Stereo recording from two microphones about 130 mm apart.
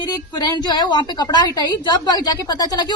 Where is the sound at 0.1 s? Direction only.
30° left (ahead or behind).